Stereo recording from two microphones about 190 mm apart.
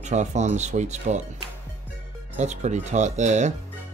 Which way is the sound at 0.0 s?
40° right (ahead or behind).